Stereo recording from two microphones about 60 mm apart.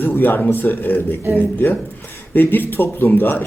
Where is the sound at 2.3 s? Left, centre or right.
Left.